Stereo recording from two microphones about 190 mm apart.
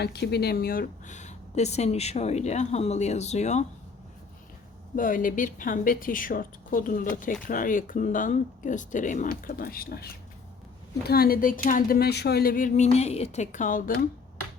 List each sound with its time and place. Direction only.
0.0 s speech: 60° left (ahead or behind); by 3.7 s 35° left (ahead or behind)
4.9 s speech: 45° left (ahead or behind)